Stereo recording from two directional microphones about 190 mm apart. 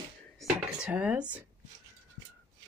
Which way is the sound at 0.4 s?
5° right (ahead or behind).